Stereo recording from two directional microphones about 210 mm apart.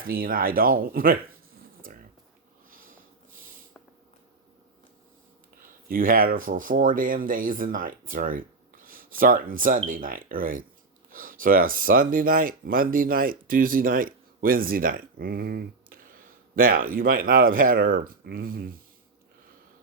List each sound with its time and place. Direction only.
0.0 s speech: 45° right (ahead or behind)
1.8 s a sound: 40° right (ahead or behind)
2.6 s sniff: 40° right (ahead or behind)
5.6 s speech: 40° right (ahead or behind)